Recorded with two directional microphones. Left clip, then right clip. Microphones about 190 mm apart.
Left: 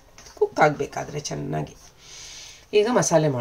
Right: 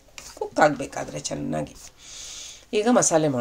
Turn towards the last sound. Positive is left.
turn(degrees=-30)  # may be behind; listen again after turning